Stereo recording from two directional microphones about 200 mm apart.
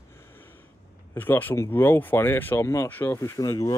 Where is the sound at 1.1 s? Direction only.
10° left (ahead or behind).